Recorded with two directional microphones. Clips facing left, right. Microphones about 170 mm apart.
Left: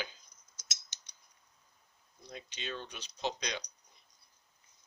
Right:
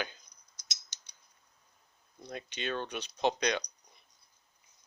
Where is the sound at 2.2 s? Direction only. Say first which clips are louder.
Right 6 dB; 60° right (ahead or behind).